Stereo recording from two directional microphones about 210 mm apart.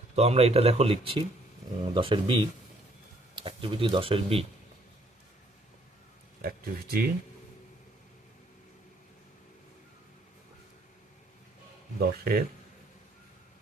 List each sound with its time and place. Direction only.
0.2 s speech: 30° right (ahead or behind)
6.4 s speech: 45° right (ahead or behind)
11.9 s speech: 45° right (ahead or behind)